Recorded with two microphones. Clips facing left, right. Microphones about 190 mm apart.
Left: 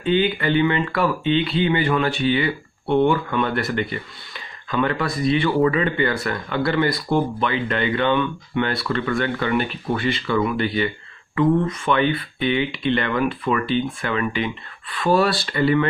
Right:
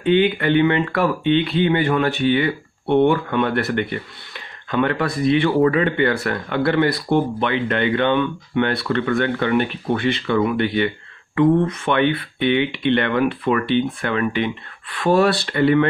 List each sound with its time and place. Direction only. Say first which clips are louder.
0.0 s speech: right 3 dB; 60° right (ahead or behind)